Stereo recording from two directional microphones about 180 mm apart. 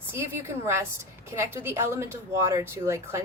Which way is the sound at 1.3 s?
15° right (ahead or behind).